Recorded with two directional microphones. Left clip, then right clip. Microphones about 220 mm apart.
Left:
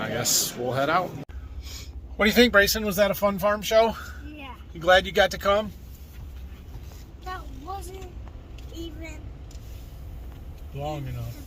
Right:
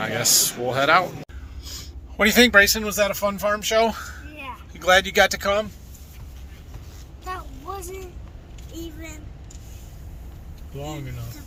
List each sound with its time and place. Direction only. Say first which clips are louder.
0.0 s speech: right 5 dB; 5° left (ahead or behind)
2.1 s speech: right 3 dB; 10° left (ahead or behind)